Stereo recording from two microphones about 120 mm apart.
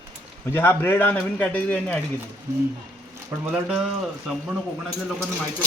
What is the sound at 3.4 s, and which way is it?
Speech, 10° right (ahead or behind).